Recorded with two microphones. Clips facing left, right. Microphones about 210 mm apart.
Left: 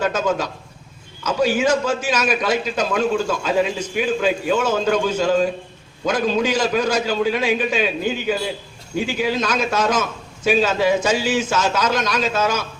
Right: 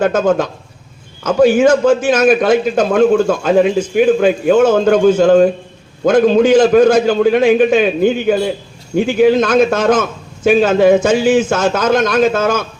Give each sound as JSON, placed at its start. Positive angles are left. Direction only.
{"t": 0.0, "sound": "a man's voice", "side_deg": -55}